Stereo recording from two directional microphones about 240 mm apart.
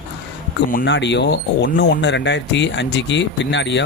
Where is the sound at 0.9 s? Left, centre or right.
Left.